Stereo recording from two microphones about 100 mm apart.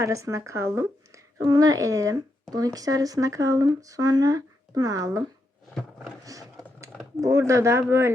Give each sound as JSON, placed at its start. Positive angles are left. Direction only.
{"t": 0.0, "sound": "a woman's voice", "side_deg": -30}
{"t": 6.2, "sound": "a woman's voice", "side_deg": -35}